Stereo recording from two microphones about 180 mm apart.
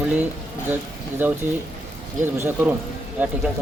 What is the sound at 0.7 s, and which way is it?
Speech, 10° right (ahead or behind).